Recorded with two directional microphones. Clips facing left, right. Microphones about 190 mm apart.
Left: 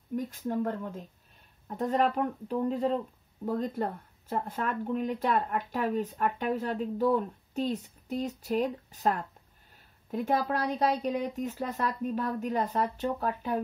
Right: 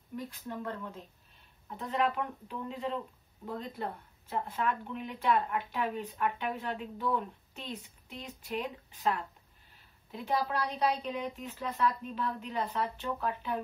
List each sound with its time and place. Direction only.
0.1 s speech: 45° left (ahead or behind)